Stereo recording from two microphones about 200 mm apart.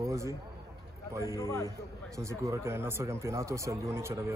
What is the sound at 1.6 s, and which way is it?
Speech, 15° right (ahead or behind).